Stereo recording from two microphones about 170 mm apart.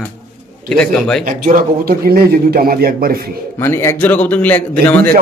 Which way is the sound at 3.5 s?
15° left (ahead or behind).